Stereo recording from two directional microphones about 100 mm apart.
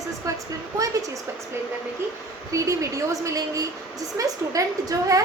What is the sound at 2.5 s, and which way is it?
A woman's voice, 30° right (ahead or behind).